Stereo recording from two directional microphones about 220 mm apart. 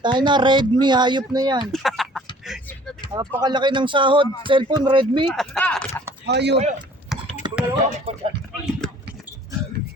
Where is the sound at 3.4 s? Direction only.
20° right (ahead or behind).